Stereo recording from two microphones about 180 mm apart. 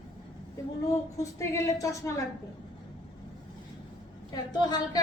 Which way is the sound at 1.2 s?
15° left (ahead or behind).